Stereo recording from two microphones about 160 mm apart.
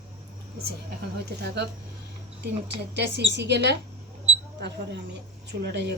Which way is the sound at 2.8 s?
90° right.